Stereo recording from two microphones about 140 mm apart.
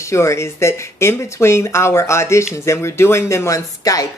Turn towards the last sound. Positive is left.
turn(degrees=25)  # may be behind; listen again after turning